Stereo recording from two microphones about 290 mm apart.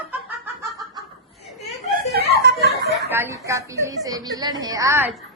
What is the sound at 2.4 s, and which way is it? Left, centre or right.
Speech, right.